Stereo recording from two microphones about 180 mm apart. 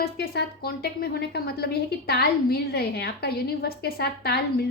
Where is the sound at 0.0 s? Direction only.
60° left (ahead or behind).